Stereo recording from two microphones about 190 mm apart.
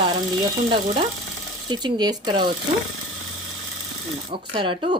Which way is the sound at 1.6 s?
20° right (ahead or behind).